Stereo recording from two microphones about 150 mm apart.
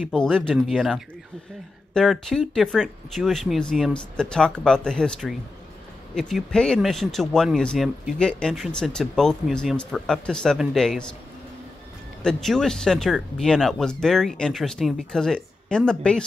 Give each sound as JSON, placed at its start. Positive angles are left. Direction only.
{"t": 0.1, "sound": "speech", "side_deg": 5}
{"t": 6.3, "sound": "speech", "side_deg": 5}
{"t": 12.2, "sound": "speech", "side_deg": 5}